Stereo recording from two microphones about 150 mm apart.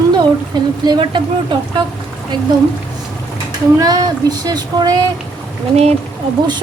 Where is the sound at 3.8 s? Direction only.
25° right (ahead or behind).